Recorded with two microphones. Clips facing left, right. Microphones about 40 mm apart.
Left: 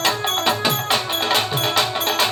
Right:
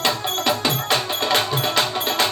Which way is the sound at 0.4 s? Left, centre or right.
Left.